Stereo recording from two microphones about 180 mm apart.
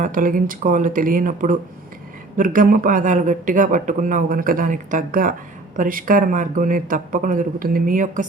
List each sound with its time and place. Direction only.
0.0 s a man's voice: 50° right (ahead or behind)